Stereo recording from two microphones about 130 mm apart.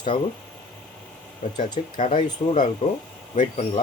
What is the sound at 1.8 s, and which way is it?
Speech, 55° left (ahead or behind).